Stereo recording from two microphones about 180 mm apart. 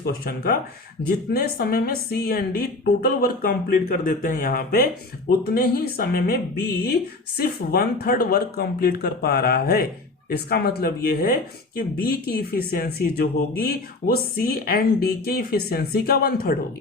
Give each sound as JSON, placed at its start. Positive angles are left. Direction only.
{"t": 0.0, "sound": "speech", "side_deg": 55}